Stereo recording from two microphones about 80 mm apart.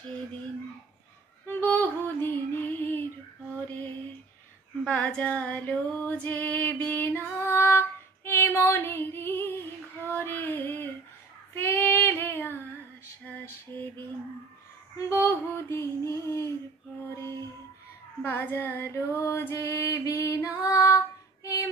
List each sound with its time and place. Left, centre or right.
1.5 s female singing: left
13.2 s a sound: left
15.0 s female singing: left
18.2 s female singing: left